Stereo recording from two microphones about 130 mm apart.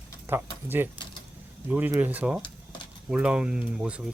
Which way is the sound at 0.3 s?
15° right (ahead or behind).